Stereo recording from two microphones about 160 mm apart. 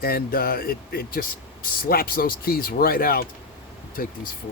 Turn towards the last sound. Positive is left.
turn(degrees=65)  # may be behind; listen again after turning